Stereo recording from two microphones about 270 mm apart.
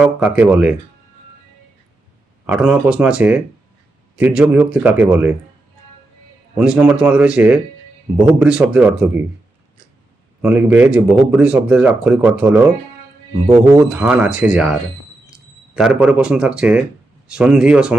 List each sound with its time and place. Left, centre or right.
0.0 s speech: centre
2.5 s speech: centre
6.6 s speech: centre
10.4 s speech: centre